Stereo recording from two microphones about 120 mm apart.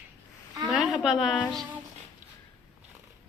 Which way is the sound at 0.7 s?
5° right (ahead or behind).